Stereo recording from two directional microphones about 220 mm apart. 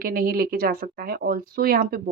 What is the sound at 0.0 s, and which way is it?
Speech, 40° right (ahead or behind).